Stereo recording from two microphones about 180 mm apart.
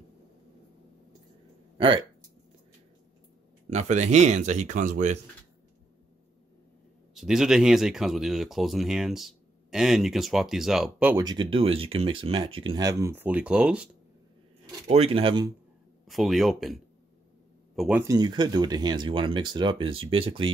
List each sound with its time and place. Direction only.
1.8 s speech: 25° right (ahead or behind)
3.7 s speech: 40° right (ahead or behind)
7.2 s speech: 5° right (ahead or behind)
11.1 s speech: 25° right (ahead or behind); by 13.8 s 5° right (ahead or behind)
14.9 s speech: 35° right (ahead or behind)
16.1 s speech: centre (ahead or behind)
18.0 s speech: 20° right (ahead or behind)